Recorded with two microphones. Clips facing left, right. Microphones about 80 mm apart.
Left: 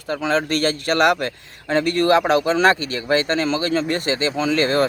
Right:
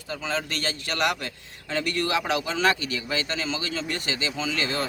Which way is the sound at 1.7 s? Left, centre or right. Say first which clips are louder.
Left 10 dB; left.